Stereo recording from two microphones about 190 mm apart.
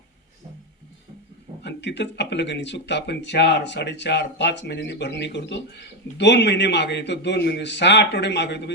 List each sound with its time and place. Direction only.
1.6 s speech: 65° left (ahead or behind)